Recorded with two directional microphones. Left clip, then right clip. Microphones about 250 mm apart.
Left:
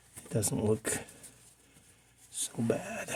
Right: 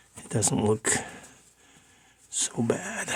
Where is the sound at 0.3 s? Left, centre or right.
Right.